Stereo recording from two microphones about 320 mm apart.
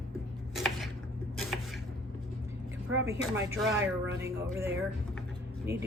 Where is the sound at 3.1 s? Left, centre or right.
Centre.